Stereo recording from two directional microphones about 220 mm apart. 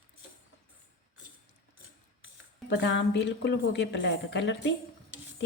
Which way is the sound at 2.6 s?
55° left (ahead or behind).